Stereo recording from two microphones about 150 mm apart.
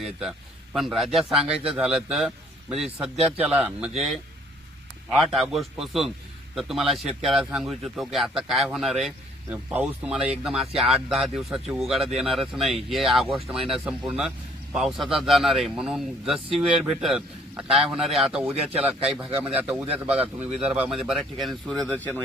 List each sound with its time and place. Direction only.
0.0 s a man's voice: 5° right (ahead or behind)
5.1 s a man's voice: centre (ahead or behind)
18.7 s a man's voice: 45° right (ahead or behind)
19.4 s a man's voice: 10° right (ahead or behind)
21.9 s speech: 10° left (ahead or behind)